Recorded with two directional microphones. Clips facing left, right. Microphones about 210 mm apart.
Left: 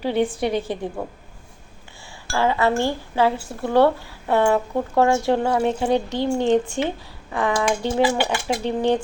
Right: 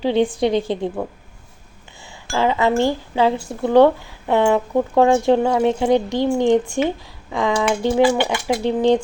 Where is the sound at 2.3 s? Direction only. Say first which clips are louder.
Right 2 dB; 15° right (ahead or behind).